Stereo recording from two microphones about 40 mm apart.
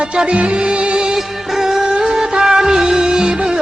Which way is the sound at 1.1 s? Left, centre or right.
Centre.